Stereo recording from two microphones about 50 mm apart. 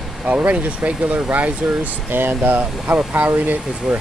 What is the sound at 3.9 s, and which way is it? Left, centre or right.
Speech, centre.